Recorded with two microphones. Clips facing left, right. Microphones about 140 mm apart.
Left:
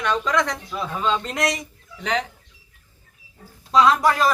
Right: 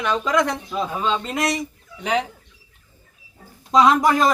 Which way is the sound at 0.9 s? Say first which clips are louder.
Left 2 dB; 5° right (ahead or behind).